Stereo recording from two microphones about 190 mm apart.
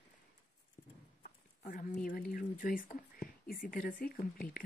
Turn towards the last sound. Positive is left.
turn(degrees=50)  # may be behind; listen again after turning